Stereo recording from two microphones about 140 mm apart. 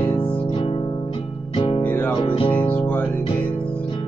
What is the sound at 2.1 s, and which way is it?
Music, 40° left (ahead or behind).